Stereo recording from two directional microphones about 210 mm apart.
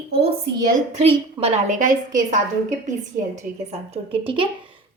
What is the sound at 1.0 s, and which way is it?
A woman's voice, 30° right (ahead or behind).